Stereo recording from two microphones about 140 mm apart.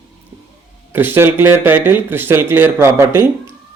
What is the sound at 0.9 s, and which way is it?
Speech, 15° right (ahead or behind).